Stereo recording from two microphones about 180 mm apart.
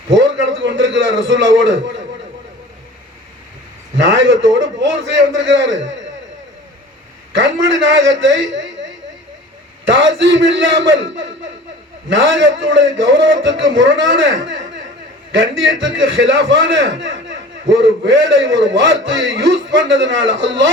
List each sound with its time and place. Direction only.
0.1 s a sound: 90° right
3.9 s a man's voice: 90° right
7.3 s a man's voice: 90° right
15.8 s a man's voice: 90° right